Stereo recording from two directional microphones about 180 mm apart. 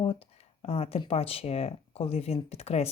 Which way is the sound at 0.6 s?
35° left (ahead or behind).